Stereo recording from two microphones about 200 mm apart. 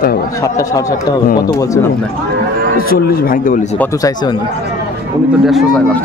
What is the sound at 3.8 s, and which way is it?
Speech, 15° left (ahead or behind).